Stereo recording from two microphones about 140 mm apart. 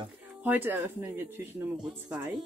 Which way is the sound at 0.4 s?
15° right (ahead or behind).